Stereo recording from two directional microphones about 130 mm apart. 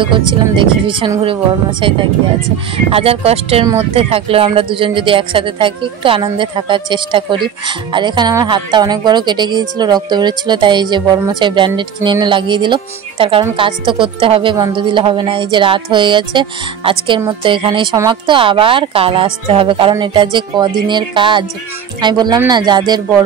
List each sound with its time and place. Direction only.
0.0 s speech: 40° right (ahead or behind)